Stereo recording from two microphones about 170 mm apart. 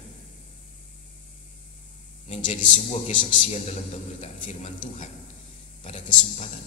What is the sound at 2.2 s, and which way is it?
A man's voice, 45° left (ahead or behind).